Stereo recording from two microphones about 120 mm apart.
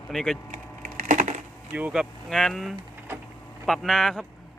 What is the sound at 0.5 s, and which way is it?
Wood, 90° right.